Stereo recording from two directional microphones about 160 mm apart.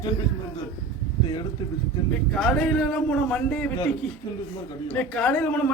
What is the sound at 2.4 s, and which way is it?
Speech, 5° left (ahead or behind).